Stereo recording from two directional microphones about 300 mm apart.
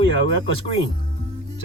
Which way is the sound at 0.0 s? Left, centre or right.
Right.